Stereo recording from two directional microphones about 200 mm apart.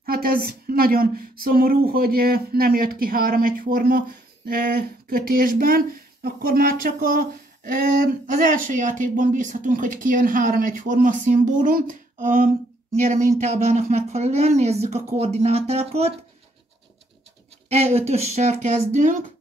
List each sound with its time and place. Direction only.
0.0 s a woman's voice: 50° right (ahead or behind); by 16.1 s 30° right (ahead or behind)
17.6 s a woman's voice: 30° right (ahead or behind)